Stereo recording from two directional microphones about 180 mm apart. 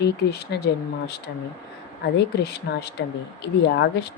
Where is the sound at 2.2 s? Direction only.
65° left (ahead or behind).